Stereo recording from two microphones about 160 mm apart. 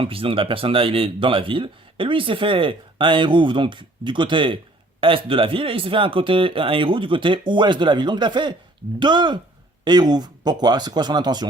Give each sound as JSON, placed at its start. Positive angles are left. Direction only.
{"t": 0.0, "sound": "speech", "side_deg": -35}